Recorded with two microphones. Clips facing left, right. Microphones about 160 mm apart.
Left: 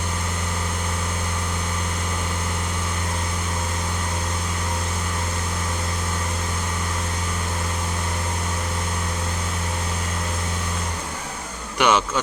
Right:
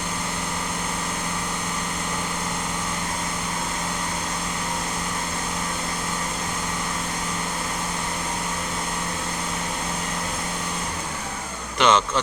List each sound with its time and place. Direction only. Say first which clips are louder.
11.8 s a man's voice: even; 10° left (ahead or behind)